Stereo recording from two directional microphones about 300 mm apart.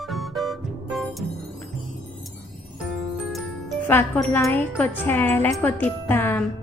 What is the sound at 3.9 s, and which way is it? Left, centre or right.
Wind chime, centre.